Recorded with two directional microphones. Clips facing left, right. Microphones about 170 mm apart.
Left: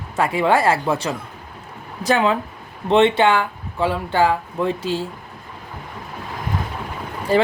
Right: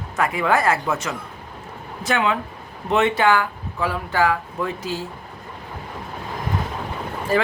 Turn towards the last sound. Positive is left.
turn(degrees=30)  # may be behind; listen again after turning